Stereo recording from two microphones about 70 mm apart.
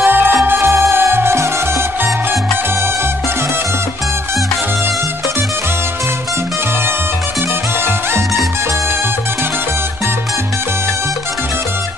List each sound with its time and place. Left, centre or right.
0.0 s music: right